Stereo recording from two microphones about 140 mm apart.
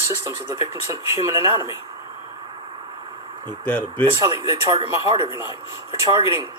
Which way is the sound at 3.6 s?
10° left (ahead or behind).